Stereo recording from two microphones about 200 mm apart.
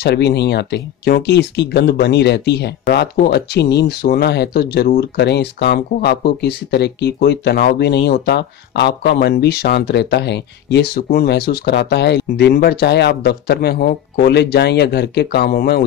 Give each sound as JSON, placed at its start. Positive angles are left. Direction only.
{"t": 0.0, "sound": "speech", "side_deg": 55}